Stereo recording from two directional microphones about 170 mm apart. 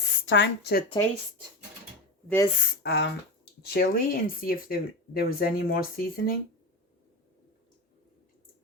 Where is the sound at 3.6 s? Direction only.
65° left (ahead or behind).